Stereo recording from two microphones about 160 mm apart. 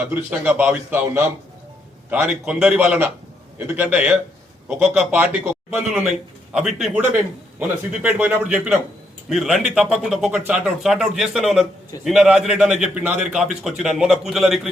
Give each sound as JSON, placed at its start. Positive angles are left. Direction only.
{"t": 0.1, "sound": "a man's voice", "side_deg": -10}
{"t": 8.0, "sound": "a man's voice", "side_deg": -10}